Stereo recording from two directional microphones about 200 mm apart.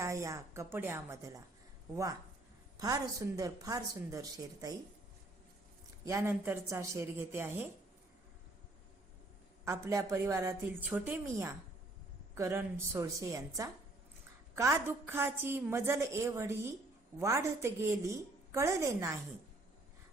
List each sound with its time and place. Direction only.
0.0 s a woman's voice: 15° right (ahead or behind)
2.7 s a woman's voice: 15° right (ahead or behind)
6.1 s a woman's voice: 10° right (ahead or behind)
9.6 s a woman's voice: 15° right (ahead or behind)